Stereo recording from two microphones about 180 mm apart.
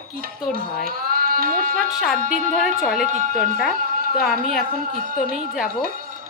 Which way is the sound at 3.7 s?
55° right (ahead or behind).